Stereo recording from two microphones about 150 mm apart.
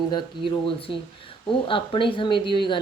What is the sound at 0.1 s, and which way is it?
Speech, 30° left (ahead or behind).